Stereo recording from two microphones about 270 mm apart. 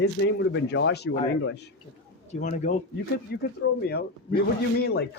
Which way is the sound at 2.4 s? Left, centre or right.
Left.